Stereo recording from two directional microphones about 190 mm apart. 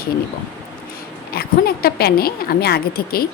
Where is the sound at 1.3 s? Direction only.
55° left (ahead or behind).